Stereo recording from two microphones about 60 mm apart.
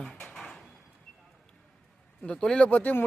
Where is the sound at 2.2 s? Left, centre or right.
Centre.